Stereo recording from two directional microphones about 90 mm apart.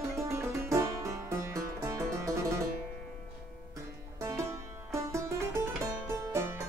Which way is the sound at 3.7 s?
35° right (ahead or behind).